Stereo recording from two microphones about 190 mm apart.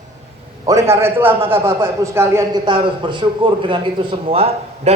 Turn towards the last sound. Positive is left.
turn(degrees=-35)  # may be behind; listen again after turning